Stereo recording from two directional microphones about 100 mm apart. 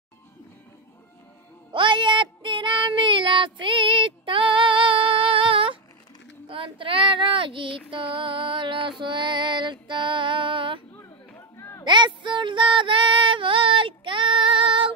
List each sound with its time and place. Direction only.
1.7 s music: 55° right (ahead or behind)
6.4 s child singing: 60° right (ahead or behind)
7.9 s music: 60° right (ahead or behind)
9.0 s female singing: 50° right (ahead or behind)
11.0 s a sound: 25° left (ahead or behind)
11.8 s female singing: 50° right (ahead or behind)